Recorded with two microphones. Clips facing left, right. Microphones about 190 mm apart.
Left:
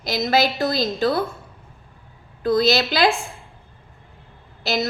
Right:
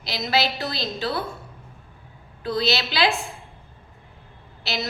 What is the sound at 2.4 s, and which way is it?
Speech, 45° left (ahead or behind).